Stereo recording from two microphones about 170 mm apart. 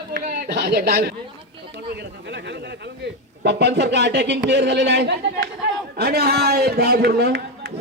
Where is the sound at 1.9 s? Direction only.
90° right.